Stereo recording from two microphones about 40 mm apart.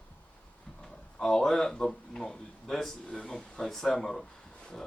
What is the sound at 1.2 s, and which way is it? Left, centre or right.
Speech, centre.